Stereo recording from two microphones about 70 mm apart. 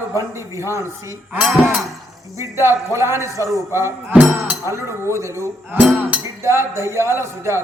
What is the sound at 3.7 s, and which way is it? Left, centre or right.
Speech, right.